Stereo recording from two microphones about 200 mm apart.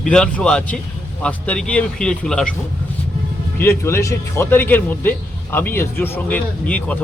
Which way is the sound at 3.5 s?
10° left (ahead or behind).